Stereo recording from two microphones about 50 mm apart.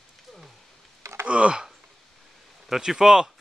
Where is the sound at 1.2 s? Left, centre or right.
Right.